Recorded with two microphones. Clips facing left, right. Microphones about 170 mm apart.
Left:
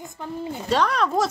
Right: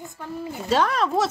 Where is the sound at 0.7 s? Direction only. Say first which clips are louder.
Even; centre (ahead or behind).